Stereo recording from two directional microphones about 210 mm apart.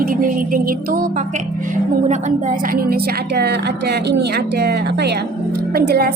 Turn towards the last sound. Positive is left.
turn(degrees=-45)  # may be behind; listen again after turning